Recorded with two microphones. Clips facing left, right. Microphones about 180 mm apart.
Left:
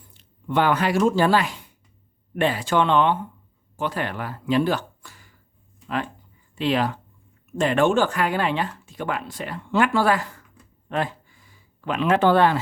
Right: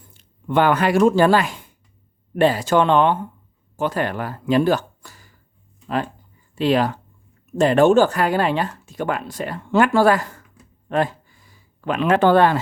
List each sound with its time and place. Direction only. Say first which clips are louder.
0.4 s speech: right 3 dB; 50° right (ahead or behind)
6.6 s speech: right 4 dB; 40° right (ahead or behind)
10.8 s a sound: right 5 dB; 45° right (ahead or behind)